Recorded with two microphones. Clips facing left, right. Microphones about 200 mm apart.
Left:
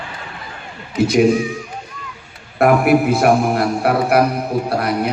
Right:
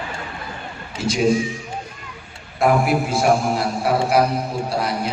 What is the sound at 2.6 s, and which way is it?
A man's voice, 60° left (ahead or behind).